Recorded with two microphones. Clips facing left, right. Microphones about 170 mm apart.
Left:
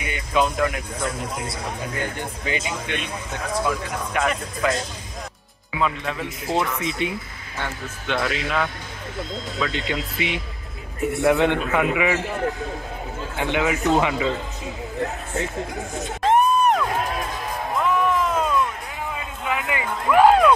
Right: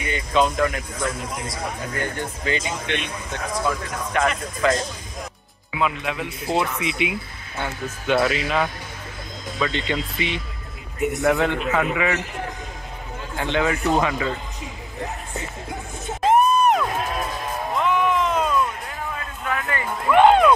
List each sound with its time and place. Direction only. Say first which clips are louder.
0.0 s speech: right 2 dB; 10° left (ahead or behind)
2.0 s speech: right 1 dB; 15° left (ahead or behind)
5.8 s speech: even; 5° right (ahead or behind)
9.6 s speech: right 2 dB; 5° left (ahead or behind)
11.2 s speech: left 2 dB; 20° left (ahead or behind)
13.4 s speech: even; 15° left (ahead or behind)
16.3 s music: right 1 dB; 5° right (ahead or behind)
17.7 s a sound: even; centre (ahead or behind)